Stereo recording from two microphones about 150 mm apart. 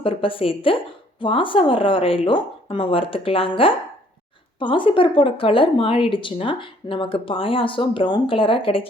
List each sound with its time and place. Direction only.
0.0 s a woman's voice: 35° left (ahead or behind)